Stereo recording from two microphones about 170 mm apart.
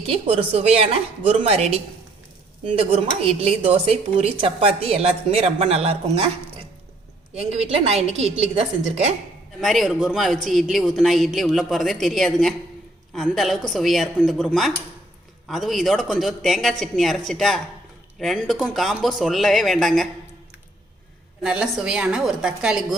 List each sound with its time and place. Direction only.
0.1 s a woman's voice: 35° right (ahead or behind)
7.3 s a woman's voice: 35° right (ahead or behind)
9.6 s speech: centre (ahead or behind)
21.4 s speech: 5° right (ahead or behind)